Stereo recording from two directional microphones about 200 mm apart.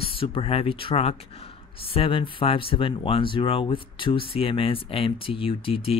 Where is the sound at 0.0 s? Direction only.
25° left (ahead or behind).